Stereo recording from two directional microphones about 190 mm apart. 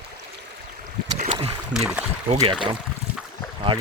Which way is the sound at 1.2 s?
35° right (ahead or behind).